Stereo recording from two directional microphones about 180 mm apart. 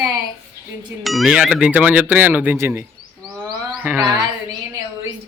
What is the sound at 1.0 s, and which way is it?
Speech, centre (ahead or behind).